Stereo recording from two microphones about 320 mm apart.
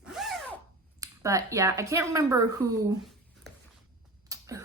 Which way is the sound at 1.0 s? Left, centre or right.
Centre.